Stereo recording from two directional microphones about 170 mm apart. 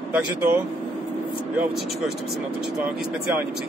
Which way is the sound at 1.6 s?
Centre (ahead or behind).